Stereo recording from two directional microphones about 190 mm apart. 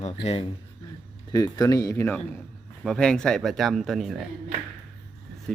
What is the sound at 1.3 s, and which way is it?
Speech, 20° left (ahead or behind).